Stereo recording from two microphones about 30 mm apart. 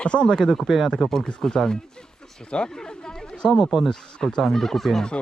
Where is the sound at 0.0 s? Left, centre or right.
Left.